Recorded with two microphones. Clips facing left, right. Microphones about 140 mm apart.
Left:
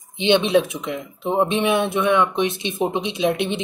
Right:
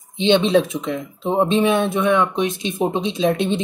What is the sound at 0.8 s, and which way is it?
Speech, 5° left (ahead or behind).